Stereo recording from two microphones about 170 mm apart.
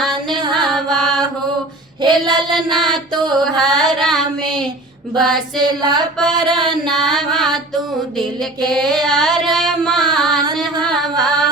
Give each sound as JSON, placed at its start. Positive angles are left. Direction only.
{"t": 0.3, "sound": "music", "side_deg": -25}
{"t": 0.7, "sound": "mantra", "side_deg": 0}
{"t": 2.0, "sound": "child singing", "side_deg": -25}
{"t": 2.3, "sound": "child singing", "side_deg": 0}
{"t": 3.4, "sound": "mantra", "side_deg": 0}
{"t": 4.0, "sound": "child singing", "side_deg": 0}
{"t": 5.1, "sound": "mantra", "side_deg": 0}
{"t": 5.5, "sound": "female singing", "side_deg": -25}
{"t": 6.1, "sound": "mantra", "side_deg": 0}
{"t": 8.7, "sound": "music", "side_deg": 0}
{"t": 10.0, "sound": "a sound", "side_deg": 0}
{"t": 10.4, "sound": "singing", "side_deg": -25}
{"t": 10.9, "sound": "a sound", "side_deg": 0}